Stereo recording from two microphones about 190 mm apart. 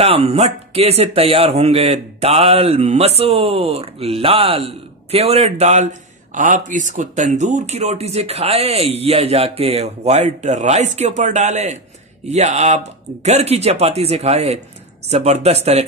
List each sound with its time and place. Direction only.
0.0 s a man's voice: 30° right (ahead or behind)